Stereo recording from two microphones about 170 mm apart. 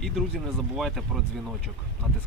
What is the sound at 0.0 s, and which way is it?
Speech, centre (ahead or behind).